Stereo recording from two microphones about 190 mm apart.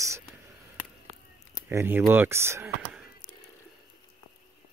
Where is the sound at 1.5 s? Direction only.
10° right (ahead or behind).